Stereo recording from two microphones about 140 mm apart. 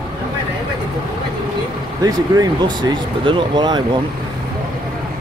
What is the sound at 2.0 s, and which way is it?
Speech, 25° right (ahead or behind).